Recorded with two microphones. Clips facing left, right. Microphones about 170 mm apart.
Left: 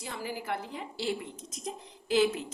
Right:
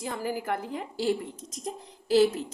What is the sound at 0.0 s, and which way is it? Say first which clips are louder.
Speech: right 6 dB; 45° right (ahead or behind).